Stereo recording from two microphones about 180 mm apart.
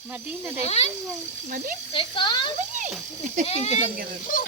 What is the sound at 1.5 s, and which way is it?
Speech, 45° right (ahead or behind).